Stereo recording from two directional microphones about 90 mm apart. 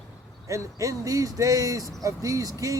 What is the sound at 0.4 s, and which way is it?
Speech, 35° right (ahead or behind).